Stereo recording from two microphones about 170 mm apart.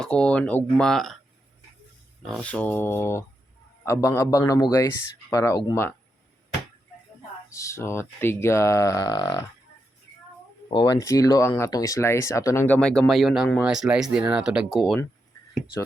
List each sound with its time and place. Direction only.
0.0 s speech: 5° left (ahead or behind)
2.2 s speech: 5° left (ahead or behind)
7.5 s speech: 15° left (ahead or behind)
10.7 s speech: 25° left (ahead or behind); by 14.9 s centre (ahead or behind)